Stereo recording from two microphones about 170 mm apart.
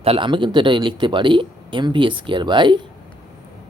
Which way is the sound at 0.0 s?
30° right (ahead or behind).